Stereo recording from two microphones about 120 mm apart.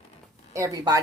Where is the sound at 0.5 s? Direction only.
25° right (ahead or behind).